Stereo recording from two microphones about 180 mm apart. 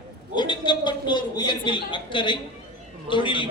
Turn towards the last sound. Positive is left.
turn(degrees=25)  # may be behind; listen again after turning